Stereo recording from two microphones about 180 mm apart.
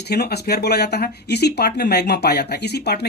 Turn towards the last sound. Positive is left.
turn(degrees=65)  # may be behind; listen again after turning